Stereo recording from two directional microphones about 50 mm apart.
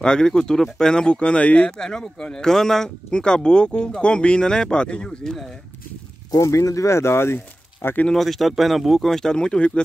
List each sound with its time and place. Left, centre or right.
0.0 s speech: centre
1.7 s speech: centre
6.4 s speech: left
8.1 s speech: centre